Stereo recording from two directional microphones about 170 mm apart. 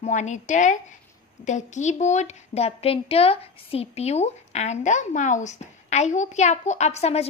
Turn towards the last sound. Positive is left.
turn(degrees=40)  # may be behind; listen again after turning